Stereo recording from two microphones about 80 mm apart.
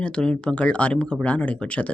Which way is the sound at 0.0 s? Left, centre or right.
Centre.